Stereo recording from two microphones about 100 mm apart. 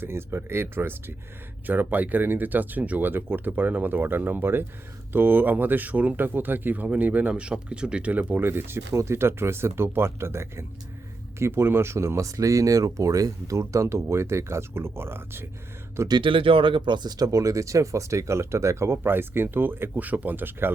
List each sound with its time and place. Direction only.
0.0 s speech: 25° right (ahead or behind)
16.0 s speech: 55° right (ahead or behind); by 20.7 s 20° right (ahead or behind)